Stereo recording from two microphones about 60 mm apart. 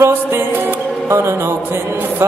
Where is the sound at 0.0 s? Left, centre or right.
Right.